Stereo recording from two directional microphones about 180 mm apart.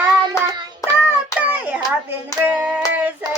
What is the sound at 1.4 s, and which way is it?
Hands, 10° right (ahead or behind).